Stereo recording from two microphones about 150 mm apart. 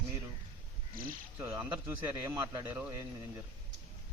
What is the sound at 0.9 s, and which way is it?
Speech, 70° right (ahead or behind).